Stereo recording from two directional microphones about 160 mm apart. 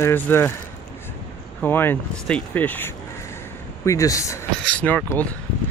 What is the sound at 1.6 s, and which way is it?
Speech, 15° left (ahead or behind).